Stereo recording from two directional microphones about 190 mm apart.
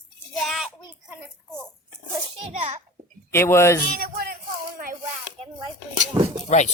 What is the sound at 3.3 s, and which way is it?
Speech, 15° left (ahead or behind).